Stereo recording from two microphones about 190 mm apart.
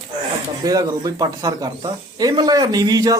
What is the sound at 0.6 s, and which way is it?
Speech, 20° right (ahead or behind).